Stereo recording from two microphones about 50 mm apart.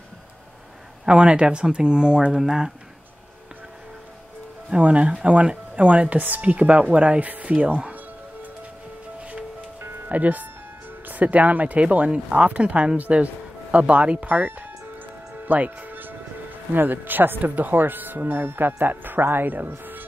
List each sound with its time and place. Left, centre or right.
1.0 s speech: centre
4.6 s speech: right
10.0 s speech: right
15.4 s music: right
17.4 s speech: right